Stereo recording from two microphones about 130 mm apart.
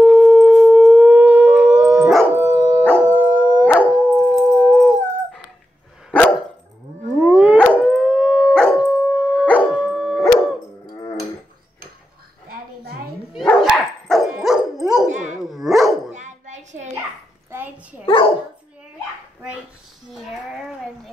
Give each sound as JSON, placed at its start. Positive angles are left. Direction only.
{"t": 0.0, "sound": "howl", "side_deg": -10}
{"t": 2.3, "sound": "dog", "side_deg": -15}
{"t": 3.0, "sound": "howl", "side_deg": -10}
{"t": 3.8, "sound": "dog", "side_deg": 0}
{"t": 7.2, "sound": "howl", "side_deg": -5}
{"t": 13.6, "sound": "dog", "side_deg": 0}
{"t": 15.0, "sound": "dog", "side_deg": -70}
{"t": 15.4, "sound": "dog", "side_deg": 0}
{"t": 16.1, "sound": "dog", "side_deg": -65}
{"t": 17.5, "sound": "a sound", "side_deg": -15}
{"t": 18.0, "sound": "dog", "side_deg": 40}
{"t": 20.1, "sound": "a sound", "side_deg": 0}